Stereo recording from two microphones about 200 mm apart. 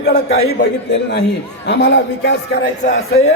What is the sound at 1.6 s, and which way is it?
Speech, 60° left (ahead or behind).